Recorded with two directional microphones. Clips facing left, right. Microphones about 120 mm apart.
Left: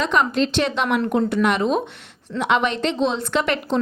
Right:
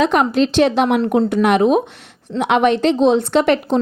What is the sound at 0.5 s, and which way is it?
Speech, 40° right (ahead or behind).